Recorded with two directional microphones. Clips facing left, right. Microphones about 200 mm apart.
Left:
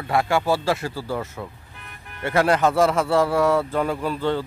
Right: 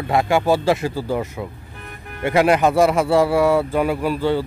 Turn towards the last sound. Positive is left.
turn(degrees=-10)  # may be behind; listen again after turning